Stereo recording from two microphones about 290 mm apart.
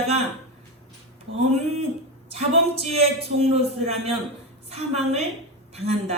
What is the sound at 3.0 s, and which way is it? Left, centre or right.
A man's voice, right.